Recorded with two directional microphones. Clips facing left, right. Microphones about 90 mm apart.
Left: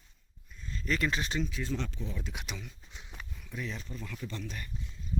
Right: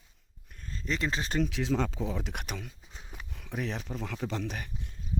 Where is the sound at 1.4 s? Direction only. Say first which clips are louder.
Right 6 dB; 85° right; by 2.4 s 65° right (ahead or behind).